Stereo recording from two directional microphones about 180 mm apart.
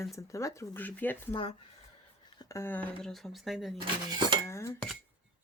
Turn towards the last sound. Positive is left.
turn(degrees=15)  # may be behind; listen again after turning